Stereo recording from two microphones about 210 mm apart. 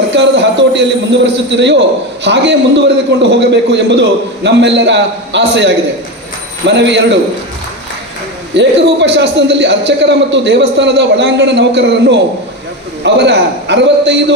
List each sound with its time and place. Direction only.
0.1 s a sound: 55° right (ahead or behind)
1.5 s a man's voice: 55° right (ahead or behind)
8.5 s a man's voice: 55° right (ahead or behind)